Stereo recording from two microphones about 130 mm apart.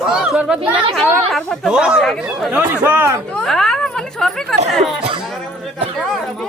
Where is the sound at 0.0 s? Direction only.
5° right (ahead or behind).